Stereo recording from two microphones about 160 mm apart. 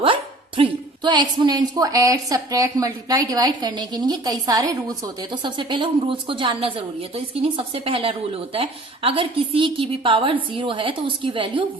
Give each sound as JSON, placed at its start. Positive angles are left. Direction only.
{"t": 0.0, "sound": "a woman's voice", "side_deg": -35}